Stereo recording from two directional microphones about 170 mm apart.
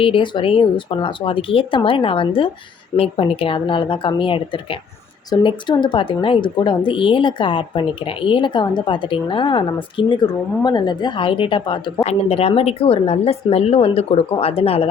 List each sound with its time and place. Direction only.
0.0 s speech: 30° left (ahead or behind)